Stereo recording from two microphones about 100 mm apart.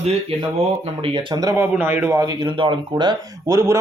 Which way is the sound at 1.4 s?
30° right (ahead or behind).